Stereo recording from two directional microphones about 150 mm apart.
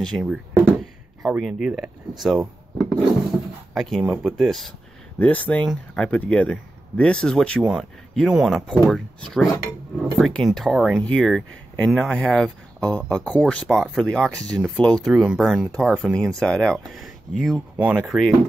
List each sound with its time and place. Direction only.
0.1 s speech: 10° right (ahead or behind)
0.7 s a sound: centre (ahead or behind)
2.2 s speech: centre (ahead or behind)
13.7 s speech: 5° right (ahead or behind)